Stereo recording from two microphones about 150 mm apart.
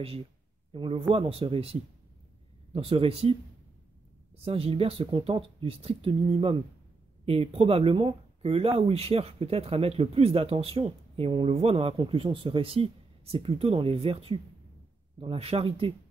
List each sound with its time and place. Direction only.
0.7 s a man's voice: 35° right (ahead or behind)
4.5 s speech: 40° right (ahead or behind)